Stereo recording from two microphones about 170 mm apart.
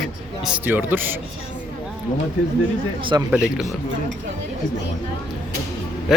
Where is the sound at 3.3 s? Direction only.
5° right (ahead or behind).